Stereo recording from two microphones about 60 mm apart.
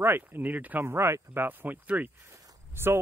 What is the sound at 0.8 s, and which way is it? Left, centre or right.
Speech, right.